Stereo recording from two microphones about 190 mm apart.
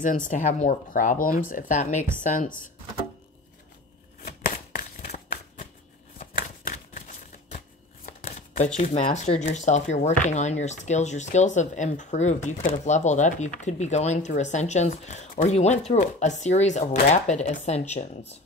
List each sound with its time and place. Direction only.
0.0 s speech: 45° left (ahead or behind)
4.2 s a sound: 50° left (ahead or behind)
6.1 s shuffling cards: 50° left (ahead or behind)
8.7 s speech: 35° left (ahead or behind)